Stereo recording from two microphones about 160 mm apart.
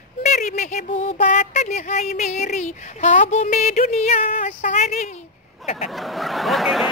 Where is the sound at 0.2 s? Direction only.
50° left (ahead or behind).